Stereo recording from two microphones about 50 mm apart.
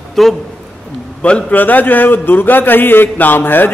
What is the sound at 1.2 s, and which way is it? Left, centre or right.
Speech, left.